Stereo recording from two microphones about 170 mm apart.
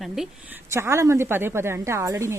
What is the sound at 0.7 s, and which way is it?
Speech, 15° right (ahead or behind).